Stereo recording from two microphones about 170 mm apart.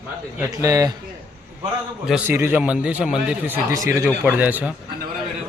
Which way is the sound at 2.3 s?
15° right (ahead or behind).